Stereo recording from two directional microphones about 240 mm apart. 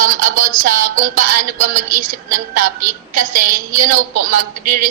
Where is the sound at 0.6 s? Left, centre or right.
Right.